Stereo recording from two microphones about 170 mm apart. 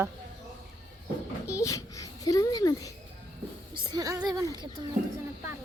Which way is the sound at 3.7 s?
25° right (ahead or behind).